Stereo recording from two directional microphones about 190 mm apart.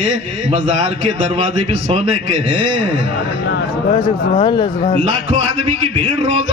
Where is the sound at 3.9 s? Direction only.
25° left (ahead or behind).